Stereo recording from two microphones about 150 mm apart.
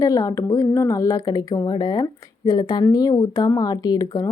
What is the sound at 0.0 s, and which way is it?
Speech, 25° left (ahead or behind).